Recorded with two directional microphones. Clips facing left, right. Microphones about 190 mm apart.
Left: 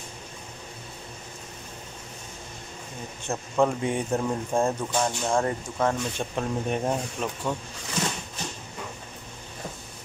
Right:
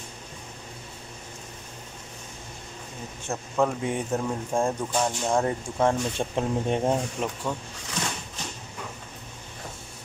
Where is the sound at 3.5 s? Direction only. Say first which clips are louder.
Left 1 dB; centre (ahead or behind).